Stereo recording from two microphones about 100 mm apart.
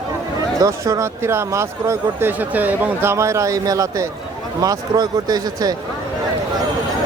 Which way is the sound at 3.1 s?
30° right (ahead or behind).